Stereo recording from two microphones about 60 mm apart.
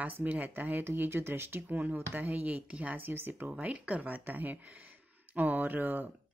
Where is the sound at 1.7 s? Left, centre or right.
Right.